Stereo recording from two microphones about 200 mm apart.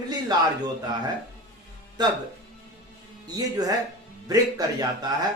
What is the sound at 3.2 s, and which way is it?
A man's voice, 20° right (ahead or behind).